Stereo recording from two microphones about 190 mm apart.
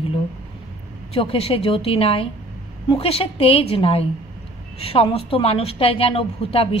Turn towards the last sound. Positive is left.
turn(degrees=30)  # may be behind; listen again after turning